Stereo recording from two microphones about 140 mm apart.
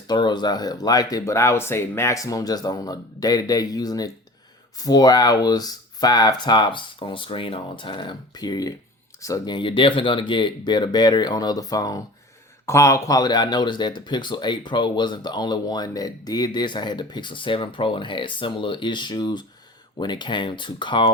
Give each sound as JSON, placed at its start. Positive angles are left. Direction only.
{"t": 0.1, "sound": "speech", "side_deg": 30}
{"t": 9.6, "sound": "speech", "side_deg": 35}